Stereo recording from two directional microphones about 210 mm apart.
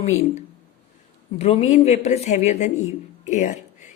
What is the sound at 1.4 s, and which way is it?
A man's voice, 30° left (ahead or behind).